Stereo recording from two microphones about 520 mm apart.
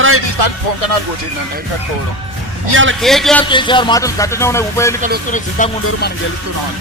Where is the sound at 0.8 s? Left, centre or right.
Left.